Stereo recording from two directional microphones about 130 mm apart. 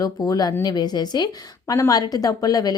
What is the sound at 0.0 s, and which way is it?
A woman's voice, 30° left (ahead or behind).